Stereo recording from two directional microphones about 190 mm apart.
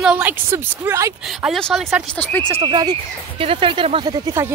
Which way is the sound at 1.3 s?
Centre (ahead or behind).